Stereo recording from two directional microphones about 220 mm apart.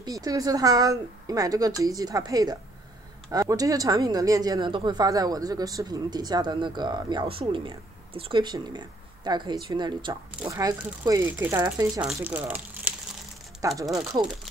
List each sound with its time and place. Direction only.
0.0 s speech: 15° right (ahead or behind)